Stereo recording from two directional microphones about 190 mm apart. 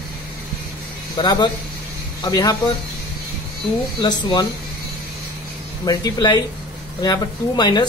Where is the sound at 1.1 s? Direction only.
25° left (ahead or behind).